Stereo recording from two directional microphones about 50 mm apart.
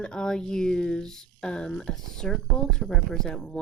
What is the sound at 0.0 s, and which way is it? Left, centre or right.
Speech, centre.